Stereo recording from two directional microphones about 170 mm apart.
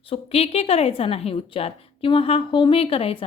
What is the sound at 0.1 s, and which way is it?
A woman's voice, 35° left (ahead or behind).